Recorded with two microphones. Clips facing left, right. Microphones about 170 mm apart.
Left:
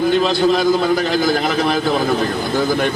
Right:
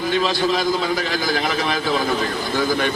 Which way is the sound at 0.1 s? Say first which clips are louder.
Left 1 dB; 55° left (ahead or behind).